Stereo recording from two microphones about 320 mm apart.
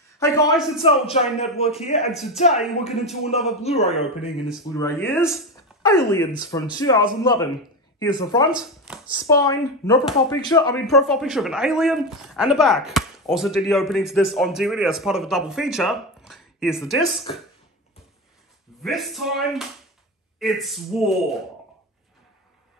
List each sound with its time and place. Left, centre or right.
0.2 s speech: centre
0.6 s speech: centre
0.8 s a man's voice: centre
2.0 s speech: centre
2.3 s a man's voice: centre
4.7 s speech: centre
8.0 s speech: centre
8.5 s speech: centre
9.1 s speech: centre
10.9 s speech: centre
17.3 s speech: centre
18.8 s speech: centre